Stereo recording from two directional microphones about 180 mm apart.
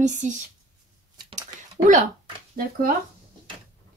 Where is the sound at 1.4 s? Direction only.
40° right (ahead or behind).